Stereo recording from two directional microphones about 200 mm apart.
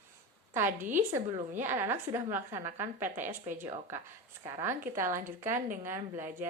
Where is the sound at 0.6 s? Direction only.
40° right (ahead or behind).